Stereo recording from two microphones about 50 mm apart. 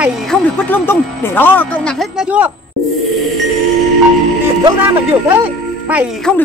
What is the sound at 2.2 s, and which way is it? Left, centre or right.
Speech, right.